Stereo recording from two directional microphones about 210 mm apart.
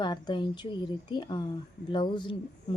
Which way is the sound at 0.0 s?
20° left (ahead or behind).